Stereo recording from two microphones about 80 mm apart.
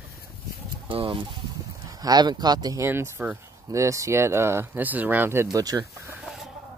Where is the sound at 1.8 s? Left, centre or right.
Right.